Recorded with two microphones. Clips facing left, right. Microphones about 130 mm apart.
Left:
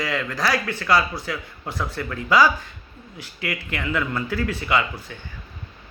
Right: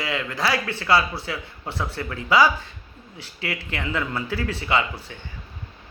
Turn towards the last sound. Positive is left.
turn(degrees=-30)  # may be behind; listen again after turning